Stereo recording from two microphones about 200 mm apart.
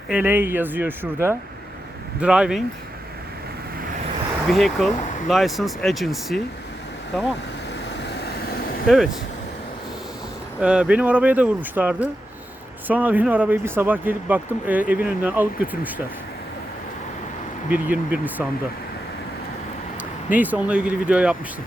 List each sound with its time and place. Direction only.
0.1 s speech: 10° right (ahead or behind)
4.4 s speech: centre (ahead or behind)
10.6 s speech: 5° right (ahead or behind)
17.7 s speech: 5° right (ahead or behind)
20.3 s speech: 10° right (ahead or behind)